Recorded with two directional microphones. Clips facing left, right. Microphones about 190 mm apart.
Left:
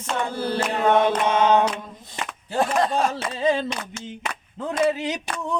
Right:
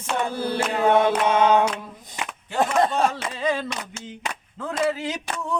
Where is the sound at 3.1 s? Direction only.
25° left (ahead or behind).